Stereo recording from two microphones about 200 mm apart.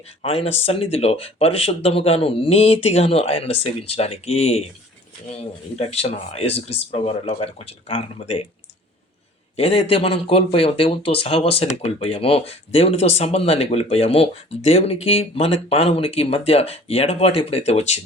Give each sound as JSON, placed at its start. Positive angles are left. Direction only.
{"t": 0.2, "sound": "speech", "side_deg": 30}
{"t": 9.6, "sound": "speech", "side_deg": 30}